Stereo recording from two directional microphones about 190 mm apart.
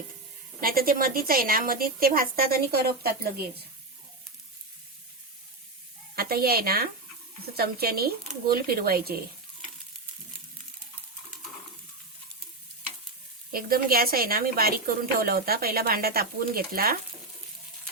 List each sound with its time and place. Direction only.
0.6 s a woman's voice: 50° right (ahead or behind)
6.1 s a woman's voice: 50° right (ahead or behind)
13.5 s a woman's voice: 50° right (ahead or behind)